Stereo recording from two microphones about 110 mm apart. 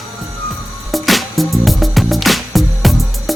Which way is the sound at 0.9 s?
Centre (ahead or behind).